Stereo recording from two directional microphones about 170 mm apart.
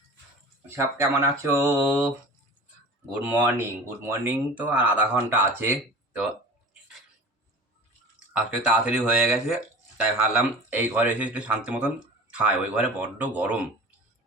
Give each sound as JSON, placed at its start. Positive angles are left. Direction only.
{"t": 0.9, "sound": "speech", "side_deg": -15}
{"t": 8.3, "sound": "speech", "side_deg": -5}